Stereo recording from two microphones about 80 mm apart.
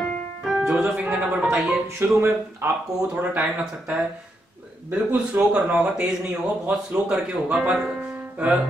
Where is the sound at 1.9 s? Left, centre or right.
Right.